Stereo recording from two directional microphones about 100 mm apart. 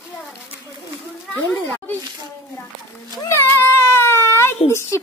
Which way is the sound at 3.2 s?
25° left (ahead or behind).